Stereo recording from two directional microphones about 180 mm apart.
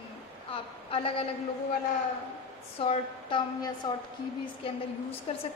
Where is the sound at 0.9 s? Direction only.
30° left (ahead or behind).